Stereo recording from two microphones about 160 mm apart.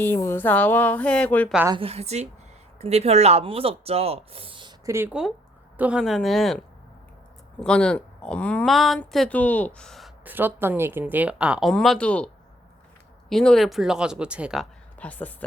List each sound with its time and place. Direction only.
0.0 s a woman's voice: 15° left (ahead or behind)
1.8 s speech: 40° right (ahead or behind)
4.9 s speech: 15° right (ahead or behind); by 6.6 s centre (ahead or behind)
7.6 s speech: 5° left (ahead or behind)
10.2 s speech: 10° right (ahead or behind); by 12.3 s 5° left (ahead or behind)
13.3 s speech: 5° left (ahead or behind)
14.9 s speech: 10° left (ahead or behind)